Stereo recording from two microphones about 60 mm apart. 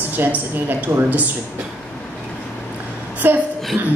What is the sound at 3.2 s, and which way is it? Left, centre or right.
Speech, right.